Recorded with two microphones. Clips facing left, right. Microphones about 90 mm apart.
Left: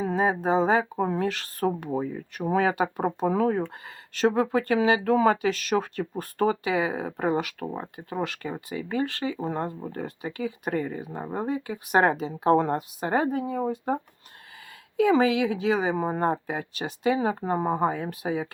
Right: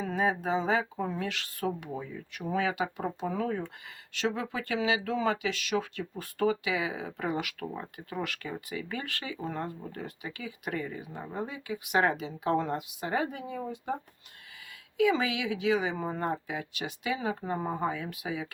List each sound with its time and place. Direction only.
0.0 s speech: 35° left (ahead or behind)